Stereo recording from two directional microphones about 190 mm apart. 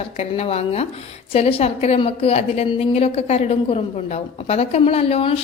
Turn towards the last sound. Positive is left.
turn(degrees=30)  # may be behind; listen again after turning